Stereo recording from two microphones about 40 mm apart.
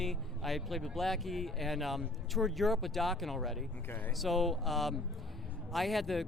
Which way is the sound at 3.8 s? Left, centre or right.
Left.